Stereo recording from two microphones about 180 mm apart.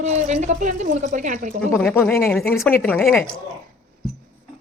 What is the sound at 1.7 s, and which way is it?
Speech, 10° left (ahead or behind).